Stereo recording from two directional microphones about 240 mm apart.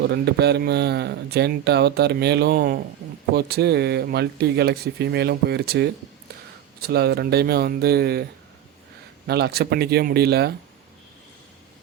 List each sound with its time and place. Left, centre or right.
0.0 s speech: right
9.2 s speech: right